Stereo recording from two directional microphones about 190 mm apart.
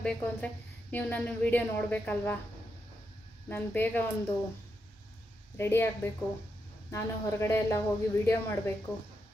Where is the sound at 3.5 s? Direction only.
10° left (ahead or behind).